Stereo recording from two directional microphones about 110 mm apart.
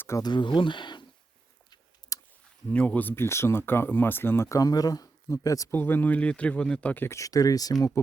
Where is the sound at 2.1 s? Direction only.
30° left (ahead or behind).